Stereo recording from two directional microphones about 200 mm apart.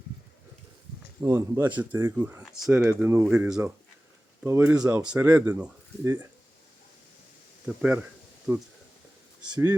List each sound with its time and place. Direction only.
1.2 s speech: 15° right (ahead or behind)
7.8 s speech: 5° right (ahead or behind)
9.5 s speech: 20° right (ahead or behind)